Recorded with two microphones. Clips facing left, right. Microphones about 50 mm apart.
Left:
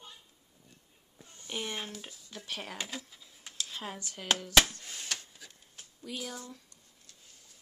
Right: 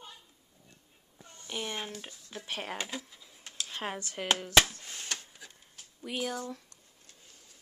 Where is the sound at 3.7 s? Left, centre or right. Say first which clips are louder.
Right 9 dB; right.